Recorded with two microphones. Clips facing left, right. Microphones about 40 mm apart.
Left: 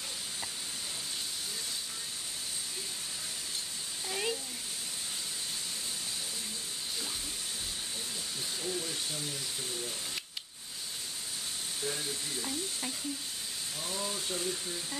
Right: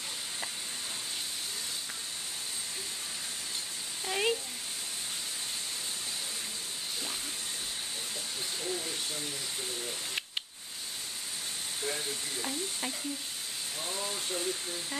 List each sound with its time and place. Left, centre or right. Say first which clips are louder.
4.1 s a sound: right 5 dB; right
8.6 s speech: even; centre
11.8 s speech: right 1 dB; centre